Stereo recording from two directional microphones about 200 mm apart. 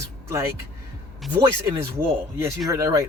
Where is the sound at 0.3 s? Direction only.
15° right (ahead or behind).